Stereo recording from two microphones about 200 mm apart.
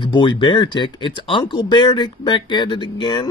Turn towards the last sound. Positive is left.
turn(degrees=25)  # may be behind; listen again after turning